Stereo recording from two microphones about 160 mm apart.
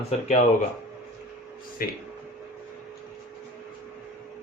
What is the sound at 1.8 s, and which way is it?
Speech, 65° left (ahead or behind).